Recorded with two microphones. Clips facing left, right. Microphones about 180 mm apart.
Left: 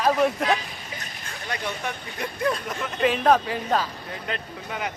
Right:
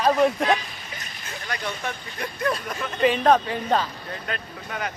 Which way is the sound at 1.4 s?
20° left (ahead or behind).